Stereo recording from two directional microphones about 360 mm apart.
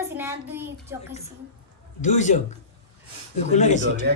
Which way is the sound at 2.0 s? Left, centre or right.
Centre.